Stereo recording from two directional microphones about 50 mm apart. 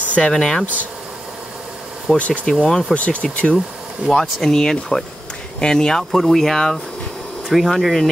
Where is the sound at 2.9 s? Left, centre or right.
Left.